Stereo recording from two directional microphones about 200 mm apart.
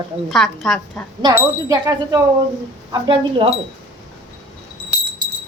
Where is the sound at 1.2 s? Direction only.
20° right (ahead or behind).